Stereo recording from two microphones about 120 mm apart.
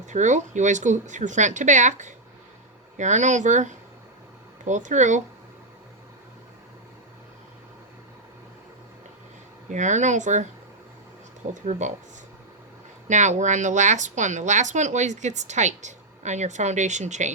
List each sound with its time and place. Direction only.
0.1 s a woman's voice: 90° right
9.6 s a woman's voice: 90° right
11.6 s speech: 75° right (ahead or behind)
13.1 s speech: 85° right